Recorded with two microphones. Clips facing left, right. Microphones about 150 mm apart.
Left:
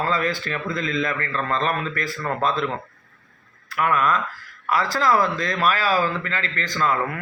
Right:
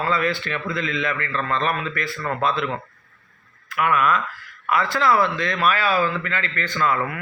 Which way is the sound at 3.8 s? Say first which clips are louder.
Right 1 dB; 35° left (ahead or behind).